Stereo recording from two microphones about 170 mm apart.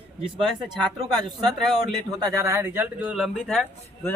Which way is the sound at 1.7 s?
Centre (ahead or behind).